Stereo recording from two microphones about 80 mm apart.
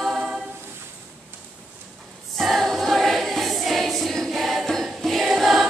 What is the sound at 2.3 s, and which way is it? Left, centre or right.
Choir, centre.